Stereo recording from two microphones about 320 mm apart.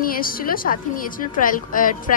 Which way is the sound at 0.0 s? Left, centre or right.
Left.